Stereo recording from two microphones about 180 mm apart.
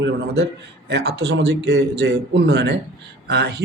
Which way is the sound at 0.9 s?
70° right (ahead or behind).